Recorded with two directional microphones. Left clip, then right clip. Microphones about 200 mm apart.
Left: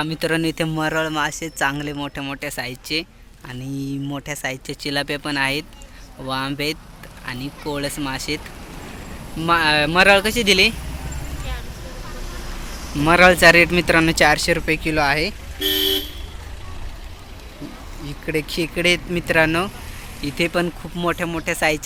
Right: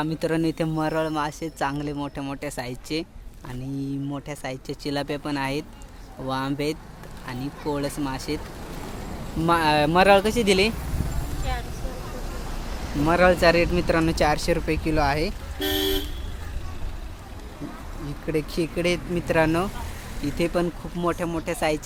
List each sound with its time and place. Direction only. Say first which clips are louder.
0.0 s speech: left 3 dB; 5° right (ahead or behind)
9.4 s speech: left 3 dB; 10° right (ahead or behind)
13.1 s speech: left 7 dB; centre (ahead or behind)
15.5 s vehicle: left 5 dB; 35° right (ahead or behind)
18.3 s speech: left 3 dB; 5° right (ahead or behind)